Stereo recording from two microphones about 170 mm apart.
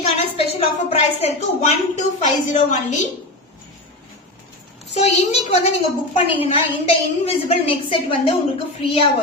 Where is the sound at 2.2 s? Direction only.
45° left (ahead or behind).